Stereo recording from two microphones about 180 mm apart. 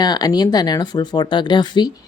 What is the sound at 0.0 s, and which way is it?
Speech, 20° left (ahead or behind).